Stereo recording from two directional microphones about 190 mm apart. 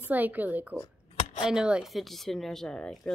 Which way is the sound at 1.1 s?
40° left (ahead or behind).